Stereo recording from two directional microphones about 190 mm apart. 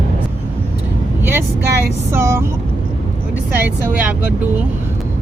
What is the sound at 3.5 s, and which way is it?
Speech, 10° right (ahead or behind).